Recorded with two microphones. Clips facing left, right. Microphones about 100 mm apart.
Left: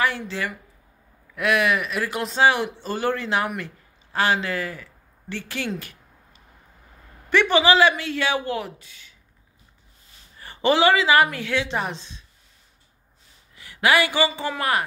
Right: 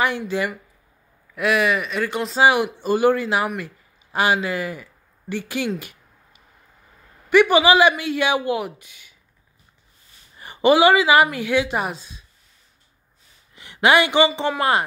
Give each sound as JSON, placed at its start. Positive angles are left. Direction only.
{"t": 0.0, "sound": "speech", "side_deg": -15}
{"t": 1.3, "sound": "speech", "side_deg": 0}
{"t": 2.4, "sound": "speech", "side_deg": -15}
{"t": 5.8, "sound": "a sound", "side_deg": -15}
{"t": 7.2, "sound": "speech", "side_deg": -10}
{"t": 10.4, "sound": "a woman's voice", "side_deg": -15}
{"t": 13.6, "sound": "speech", "side_deg": -20}